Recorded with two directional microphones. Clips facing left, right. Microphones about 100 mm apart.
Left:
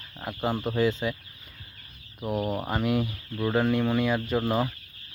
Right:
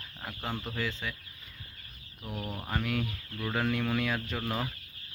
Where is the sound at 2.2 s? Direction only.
60° left (ahead or behind).